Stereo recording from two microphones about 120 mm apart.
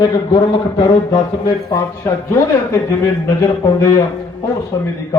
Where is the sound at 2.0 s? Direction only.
25° left (ahead or behind).